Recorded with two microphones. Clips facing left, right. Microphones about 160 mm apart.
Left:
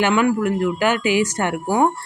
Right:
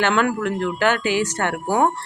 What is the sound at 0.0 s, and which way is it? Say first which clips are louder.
A man's voice: left 2 dB; 5° left (ahead or behind).